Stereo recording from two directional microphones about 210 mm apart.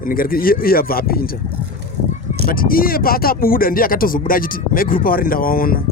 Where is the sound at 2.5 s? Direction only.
45° left (ahead or behind).